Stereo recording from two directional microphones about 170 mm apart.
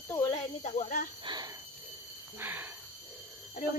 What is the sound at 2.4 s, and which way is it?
Speech, 10° right (ahead or behind).